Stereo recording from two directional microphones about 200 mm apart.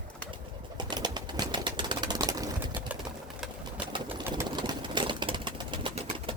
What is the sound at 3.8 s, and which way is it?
Pigeon, 25° right (ahead or behind).